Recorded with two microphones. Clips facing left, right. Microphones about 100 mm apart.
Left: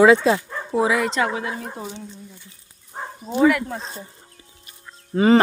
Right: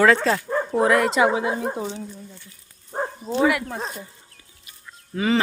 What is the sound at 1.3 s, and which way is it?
Speech, 20° right (ahead or behind).